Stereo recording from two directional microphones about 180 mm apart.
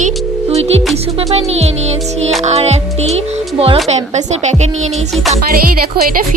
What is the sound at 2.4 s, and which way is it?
Speech, 35° right (ahead or behind).